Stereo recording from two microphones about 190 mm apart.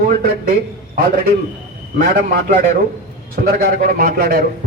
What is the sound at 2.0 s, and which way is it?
A man's voice, 45° right (ahead or behind).